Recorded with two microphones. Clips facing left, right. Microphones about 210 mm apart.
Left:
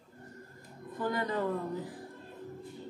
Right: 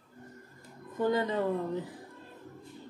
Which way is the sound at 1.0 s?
20° right (ahead or behind).